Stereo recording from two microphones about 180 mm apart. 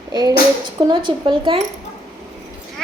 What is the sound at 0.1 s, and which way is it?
A woman's voice, 25° right (ahead or behind).